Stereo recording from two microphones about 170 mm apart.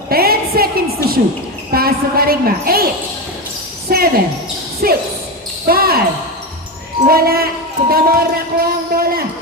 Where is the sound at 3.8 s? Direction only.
65° right (ahead or behind).